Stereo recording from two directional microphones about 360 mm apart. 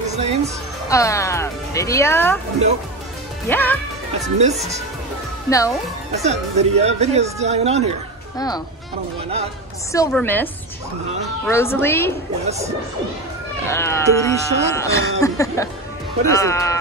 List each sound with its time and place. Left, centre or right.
0.1 s music: centre
0.8 s speech: centre
3.4 s a woman's voice: centre
4.4 s speech: centre
5.5 s speech: centre
6.2 s speech: centre
9.9 s a woman's voice: centre
12.4 s speech: centre
13.7 s speech: centre